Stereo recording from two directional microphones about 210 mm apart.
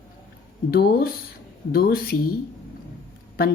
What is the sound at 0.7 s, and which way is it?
Speech, 45° left (ahead or behind).